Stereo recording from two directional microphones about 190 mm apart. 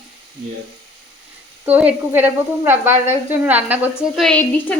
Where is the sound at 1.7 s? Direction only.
10° right (ahead or behind).